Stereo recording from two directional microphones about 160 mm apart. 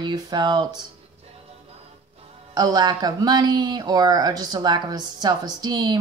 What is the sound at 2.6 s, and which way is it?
Speech, 25° right (ahead or behind).